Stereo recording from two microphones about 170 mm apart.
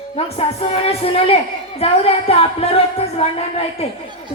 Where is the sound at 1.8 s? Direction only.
35° left (ahead or behind).